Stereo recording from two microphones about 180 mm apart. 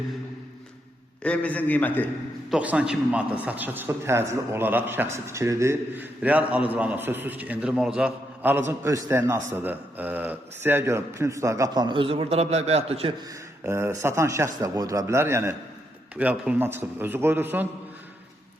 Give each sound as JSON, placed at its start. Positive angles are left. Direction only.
{"t": 1.2, "sound": "a man's voice", "side_deg": 5}
{"t": 2.5, "sound": "a man's voice", "side_deg": -5}
{"t": 13.7, "sound": "a man's voice", "side_deg": -15}